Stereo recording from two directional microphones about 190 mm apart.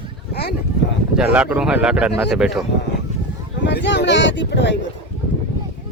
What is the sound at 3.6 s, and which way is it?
Speech, 70° left (ahead or behind).